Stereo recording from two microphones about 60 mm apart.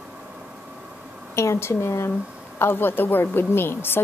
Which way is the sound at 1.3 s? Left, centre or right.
Left.